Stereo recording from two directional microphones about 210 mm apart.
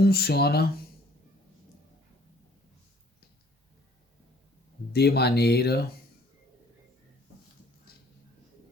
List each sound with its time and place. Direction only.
0.0 s speech: 50° left (ahead or behind)
4.9 s speech: 50° left (ahead or behind)